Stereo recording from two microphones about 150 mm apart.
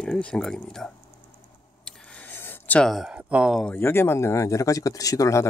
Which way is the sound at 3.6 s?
10° left (ahead or behind).